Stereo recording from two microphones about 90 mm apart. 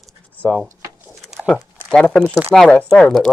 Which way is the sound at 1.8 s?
10° left (ahead or behind).